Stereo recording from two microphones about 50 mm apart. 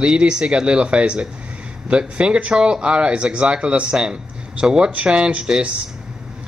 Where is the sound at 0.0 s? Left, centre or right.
Centre.